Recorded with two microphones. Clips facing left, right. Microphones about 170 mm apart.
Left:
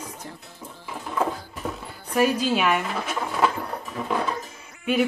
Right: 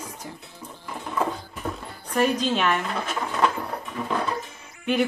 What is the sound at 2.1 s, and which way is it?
Speech, 5° left (ahead or behind).